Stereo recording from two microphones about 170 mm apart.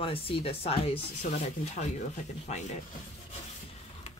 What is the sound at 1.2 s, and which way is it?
Speech, 45° left (ahead or behind).